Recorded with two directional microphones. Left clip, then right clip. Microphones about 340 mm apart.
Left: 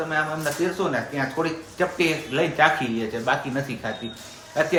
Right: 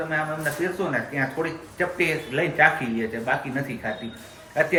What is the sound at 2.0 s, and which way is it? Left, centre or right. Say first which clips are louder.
A man's voice: left 1 dB; centre.